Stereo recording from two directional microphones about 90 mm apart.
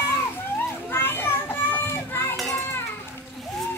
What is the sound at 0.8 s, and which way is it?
Children playing, 25° left (ahead or behind).